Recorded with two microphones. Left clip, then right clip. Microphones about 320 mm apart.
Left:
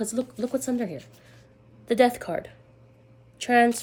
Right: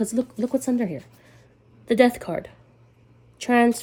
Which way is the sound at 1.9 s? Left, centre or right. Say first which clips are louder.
Right 2 dB; centre.